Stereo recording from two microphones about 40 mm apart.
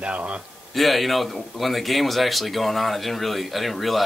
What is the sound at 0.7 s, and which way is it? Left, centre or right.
A man's voice, centre.